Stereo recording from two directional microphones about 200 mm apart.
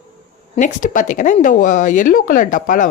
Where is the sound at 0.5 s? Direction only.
40° left (ahead or behind).